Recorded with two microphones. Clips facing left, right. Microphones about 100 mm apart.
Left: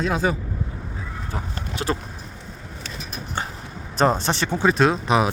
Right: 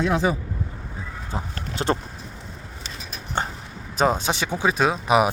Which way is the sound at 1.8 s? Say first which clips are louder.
Right 2 dB; 35° right (ahead or behind).